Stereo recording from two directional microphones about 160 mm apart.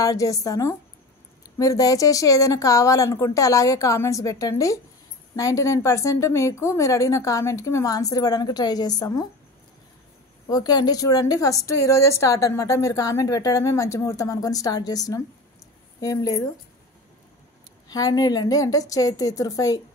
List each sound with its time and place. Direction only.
0.0 s a woman's voice: 20° left (ahead or behind)
10.5 s a woman's voice: 25° left (ahead or behind)
17.8 s a woman's voice: 25° left (ahead or behind)